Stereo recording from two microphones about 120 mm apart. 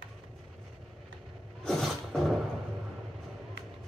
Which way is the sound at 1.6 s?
Centre (ahead or behind).